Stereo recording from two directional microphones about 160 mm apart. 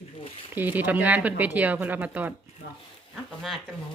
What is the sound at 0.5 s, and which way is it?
Speech, 10° right (ahead or behind).